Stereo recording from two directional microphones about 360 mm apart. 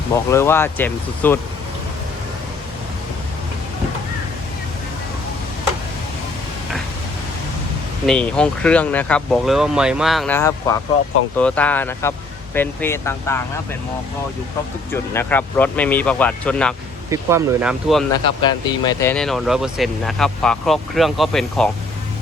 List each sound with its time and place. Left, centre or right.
0.3 s speech: centre
8.0 s speech: centre
15.1 s speech: centre
17.1 s speech: centre
18.4 s speech: centre